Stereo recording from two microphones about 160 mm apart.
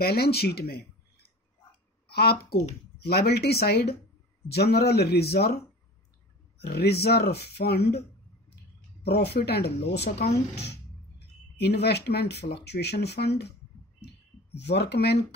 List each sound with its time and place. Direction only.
0.0 s speech: 75° left (ahead or behind)
2.0 s a sound: 75° left (ahead or behind)
3.1 s speech: 75° left (ahead or behind)
4.5 s speech: 90° left
6.6 s speech: 90° left
9.0 s speech: 90° left